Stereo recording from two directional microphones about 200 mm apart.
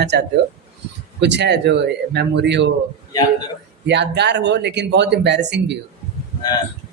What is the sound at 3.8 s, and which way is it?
Speech, 60° right (ahead or behind).